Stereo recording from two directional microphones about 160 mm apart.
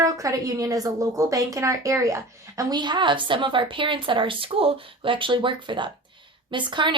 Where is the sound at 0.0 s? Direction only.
20° right (ahead or behind).